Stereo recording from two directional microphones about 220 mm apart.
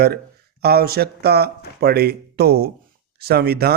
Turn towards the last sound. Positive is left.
turn(degrees=-45)  # may be behind; listen again after turning